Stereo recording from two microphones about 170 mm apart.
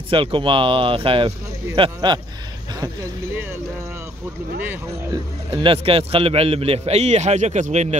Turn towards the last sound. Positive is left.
turn(degrees=-40)  # may be behind; listen again after turning